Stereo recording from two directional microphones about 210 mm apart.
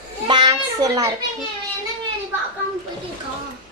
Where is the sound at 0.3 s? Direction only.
20° right (ahead or behind).